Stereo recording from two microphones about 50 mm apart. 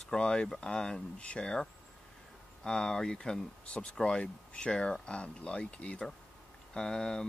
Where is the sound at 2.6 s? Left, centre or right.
Centre.